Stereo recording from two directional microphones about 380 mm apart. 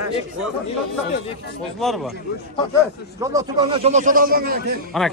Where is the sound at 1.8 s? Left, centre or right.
Centre.